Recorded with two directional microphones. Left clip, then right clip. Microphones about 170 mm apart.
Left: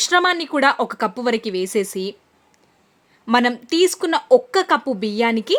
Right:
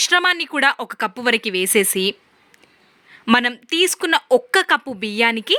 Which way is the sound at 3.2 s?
10° right (ahead or behind).